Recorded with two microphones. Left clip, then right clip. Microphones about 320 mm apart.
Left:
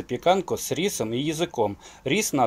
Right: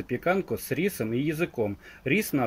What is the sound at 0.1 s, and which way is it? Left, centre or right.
Speech, left.